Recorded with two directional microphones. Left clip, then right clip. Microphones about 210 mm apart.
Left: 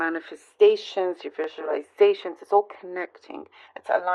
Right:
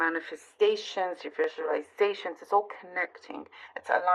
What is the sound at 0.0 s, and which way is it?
Speech, 45° left (ahead or behind).